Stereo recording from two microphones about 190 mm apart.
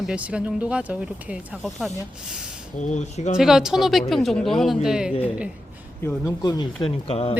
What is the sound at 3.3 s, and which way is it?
Speech, centre (ahead or behind).